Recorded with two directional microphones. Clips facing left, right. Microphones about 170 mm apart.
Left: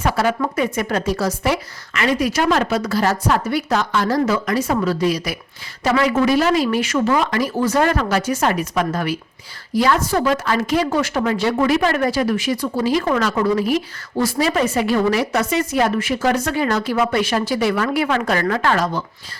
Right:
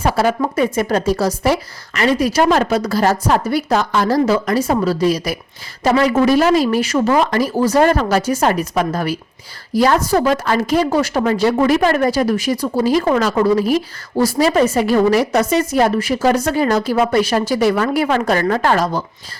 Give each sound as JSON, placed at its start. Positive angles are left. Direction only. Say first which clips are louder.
{"t": 0.0, "sound": "a woman's voice", "louder": "right 3 dB", "side_deg": -35}